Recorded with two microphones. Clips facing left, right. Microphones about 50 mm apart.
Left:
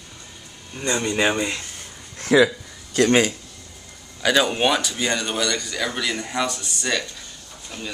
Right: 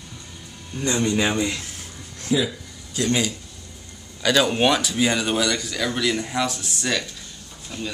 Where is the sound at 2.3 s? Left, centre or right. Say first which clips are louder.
Left 8 dB; left.